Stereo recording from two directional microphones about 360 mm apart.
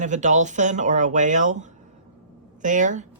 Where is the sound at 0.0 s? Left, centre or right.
Centre.